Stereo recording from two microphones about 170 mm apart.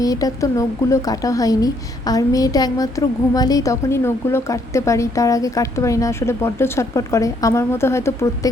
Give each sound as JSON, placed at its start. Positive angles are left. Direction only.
{"t": 0.0, "sound": "a woman's voice", "side_deg": 20}